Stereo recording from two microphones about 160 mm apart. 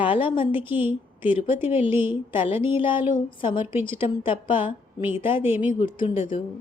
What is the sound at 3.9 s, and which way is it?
Speech, 30° left (ahead or behind).